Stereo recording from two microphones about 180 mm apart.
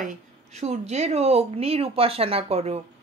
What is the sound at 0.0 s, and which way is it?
Speech, 40° right (ahead or behind).